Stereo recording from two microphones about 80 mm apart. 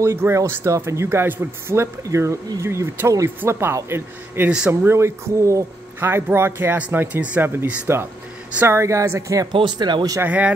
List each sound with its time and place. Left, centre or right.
0.0 s speech: right
5.9 s speech: right
8.6 s speech: right
9.5 s speech: right
10.2 s speech: centre